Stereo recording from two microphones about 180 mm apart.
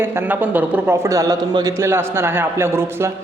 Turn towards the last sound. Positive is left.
turn(degrees=-15)  # may be behind; listen again after turning